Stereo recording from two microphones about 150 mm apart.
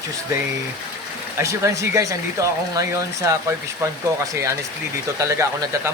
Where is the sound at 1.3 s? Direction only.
20° right (ahead or behind).